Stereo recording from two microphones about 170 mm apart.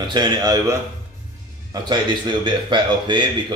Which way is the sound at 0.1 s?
25° right (ahead or behind).